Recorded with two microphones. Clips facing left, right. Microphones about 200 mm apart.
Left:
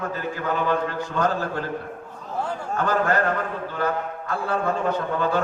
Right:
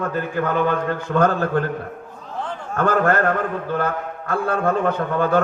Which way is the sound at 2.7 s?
55° right (ahead or behind).